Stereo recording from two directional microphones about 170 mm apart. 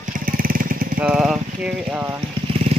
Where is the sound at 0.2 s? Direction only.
55° right (ahead or behind).